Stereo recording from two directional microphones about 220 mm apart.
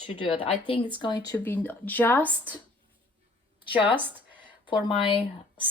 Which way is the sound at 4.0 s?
10° right (ahead or behind).